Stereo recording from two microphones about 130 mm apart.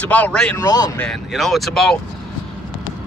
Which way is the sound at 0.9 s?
5° left (ahead or behind).